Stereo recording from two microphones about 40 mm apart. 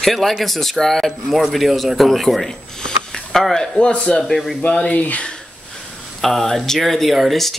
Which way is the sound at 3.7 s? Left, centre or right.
Left.